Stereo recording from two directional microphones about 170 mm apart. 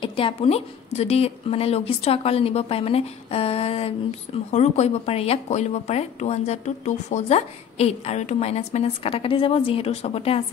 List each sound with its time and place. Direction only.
0.0 s a woman's voice: 30° left (ahead or behind)